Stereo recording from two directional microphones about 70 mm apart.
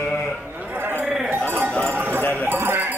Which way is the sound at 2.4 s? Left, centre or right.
Right.